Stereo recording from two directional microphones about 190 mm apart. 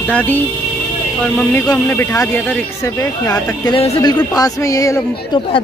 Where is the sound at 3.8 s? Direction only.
35° left (ahead or behind).